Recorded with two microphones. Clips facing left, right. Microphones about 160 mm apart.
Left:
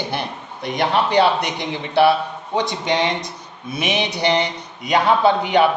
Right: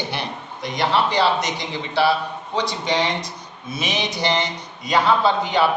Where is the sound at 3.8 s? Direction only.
60° left (ahead or behind).